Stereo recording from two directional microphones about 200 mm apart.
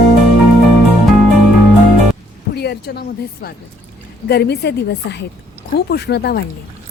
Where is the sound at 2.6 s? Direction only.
55° left (ahead or behind).